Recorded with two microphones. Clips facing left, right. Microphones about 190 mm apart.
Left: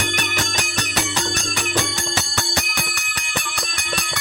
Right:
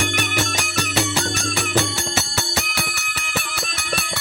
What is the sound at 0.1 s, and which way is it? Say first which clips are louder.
Music: right 2 dB; 10° right (ahead or behind).